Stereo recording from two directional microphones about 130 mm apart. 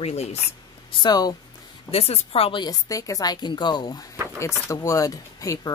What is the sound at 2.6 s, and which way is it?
Speech, 25° left (ahead or behind).